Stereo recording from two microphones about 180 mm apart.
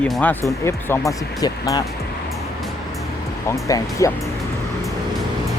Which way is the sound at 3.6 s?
15° left (ahead or behind).